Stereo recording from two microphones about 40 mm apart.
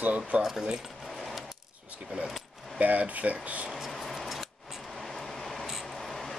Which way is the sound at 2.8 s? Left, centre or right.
Right.